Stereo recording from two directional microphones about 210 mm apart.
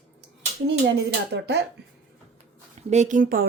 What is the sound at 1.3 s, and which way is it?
Speech, 50° right (ahead or behind).